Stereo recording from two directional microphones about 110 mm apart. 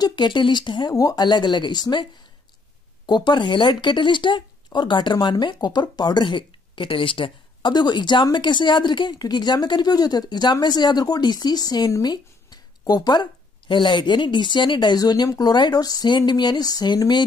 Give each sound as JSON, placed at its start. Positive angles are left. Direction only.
{"t": 0.0, "sound": "speech", "side_deg": 45}
{"t": 3.1, "sound": "speech", "side_deg": 40}